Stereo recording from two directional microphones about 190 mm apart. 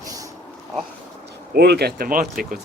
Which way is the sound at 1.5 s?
60° right (ahead or behind).